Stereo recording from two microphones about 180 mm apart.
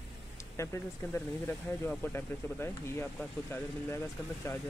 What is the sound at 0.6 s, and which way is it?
Speech, 15° left (ahead or behind).